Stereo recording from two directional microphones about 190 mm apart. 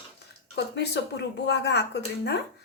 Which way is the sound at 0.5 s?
65° left (ahead or behind).